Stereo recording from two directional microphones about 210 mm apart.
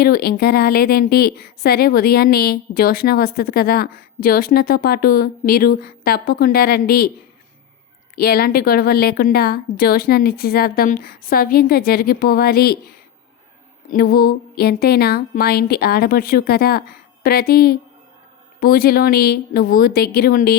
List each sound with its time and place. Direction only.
0.0 s speech: 45° left (ahead or behind)
8.1 s speech: 45° left (ahead or behind)
13.8 s speech: 45° left (ahead or behind)